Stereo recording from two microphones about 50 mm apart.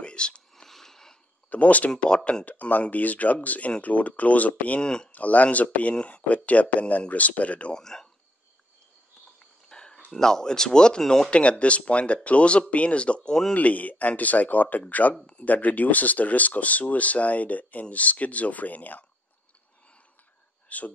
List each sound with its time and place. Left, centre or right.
0.0 s whispering: centre
0.7 s a sound: centre
1.5 s speech: left
2.4 s speech: left
4.8 s speech: centre
5.1 s speech: left
7.7 s speech: centre
9.7 s cricket: centre
10.1 s speech: centre
11.2 s speech: left
20.6 s a sound: left